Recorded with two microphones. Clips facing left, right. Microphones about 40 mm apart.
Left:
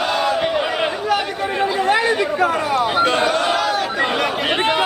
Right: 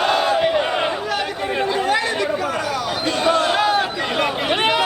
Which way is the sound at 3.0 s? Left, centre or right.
Left.